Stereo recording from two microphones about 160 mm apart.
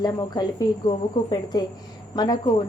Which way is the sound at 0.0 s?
25° left (ahead or behind).